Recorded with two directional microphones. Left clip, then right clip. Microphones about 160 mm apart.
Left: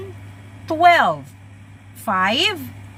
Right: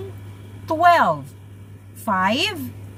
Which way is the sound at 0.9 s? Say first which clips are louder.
Left 1 dB; 30° right (ahead or behind).